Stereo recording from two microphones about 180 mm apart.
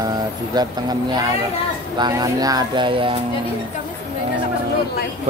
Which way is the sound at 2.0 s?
20° right (ahead or behind).